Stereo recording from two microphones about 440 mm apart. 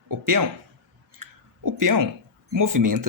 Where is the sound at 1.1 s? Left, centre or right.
Right.